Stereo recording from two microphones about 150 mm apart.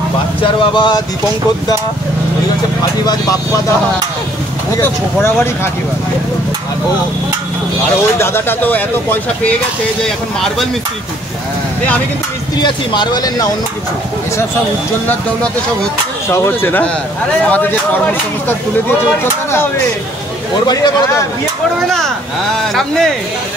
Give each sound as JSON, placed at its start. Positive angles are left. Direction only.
{"t": 0.4, "sound": "speech", "side_deg": 35}
{"t": 4.7, "sound": "speech", "side_deg": 15}
{"t": 8.2, "sound": "speech", "side_deg": 15}
{"t": 12.6, "sound": "speech", "side_deg": 30}
{"t": 16.3, "sound": "speech", "side_deg": 15}
{"t": 20.6, "sound": "speech", "side_deg": 25}